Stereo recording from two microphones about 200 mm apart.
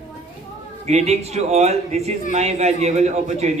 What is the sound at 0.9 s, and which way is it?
Speech, 35° right (ahead or behind).